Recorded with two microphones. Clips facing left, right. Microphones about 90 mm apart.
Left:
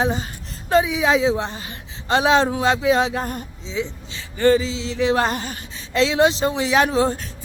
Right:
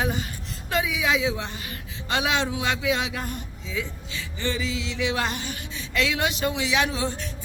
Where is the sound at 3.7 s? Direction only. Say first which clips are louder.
Left 5 dB; 25° left (ahead or behind).